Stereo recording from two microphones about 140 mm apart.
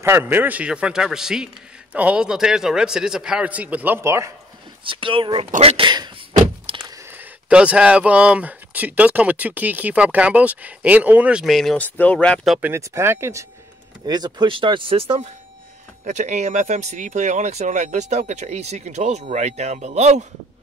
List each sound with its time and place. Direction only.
0.0 s speech: 15° right (ahead or behind)
4.8 s speech: 40° right (ahead or behind)
6.6 s door: 40° right (ahead or behind)
6.9 s speech: 20° right (ahead or behind); by 12.4 s 10° left (ahead or behind)
12.6 s speech: 20° right (ahead or behind); by 15.2 s 40° right (ahead or behind)
16.0 s speech: 60° right (ahead or behind)